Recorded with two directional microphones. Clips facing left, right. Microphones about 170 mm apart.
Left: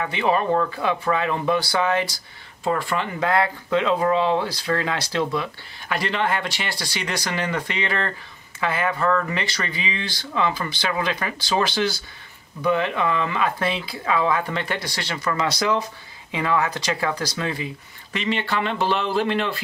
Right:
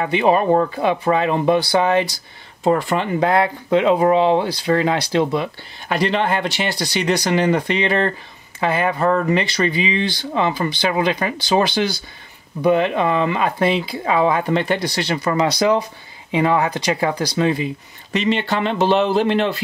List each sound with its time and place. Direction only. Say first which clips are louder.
0.0 s speech: right 6 dB; 20° right (ahead or behind)
0.5 s speech: right 5 dB; 30° right (ahead or behind)